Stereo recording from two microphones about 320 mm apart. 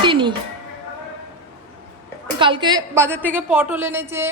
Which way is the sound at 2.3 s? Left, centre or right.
Centre.